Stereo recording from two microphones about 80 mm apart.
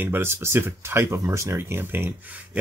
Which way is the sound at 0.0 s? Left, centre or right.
Right.